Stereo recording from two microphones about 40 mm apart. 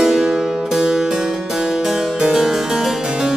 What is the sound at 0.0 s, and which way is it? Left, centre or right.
Music, centre.